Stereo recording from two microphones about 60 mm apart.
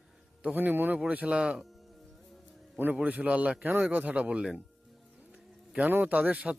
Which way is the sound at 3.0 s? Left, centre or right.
Right.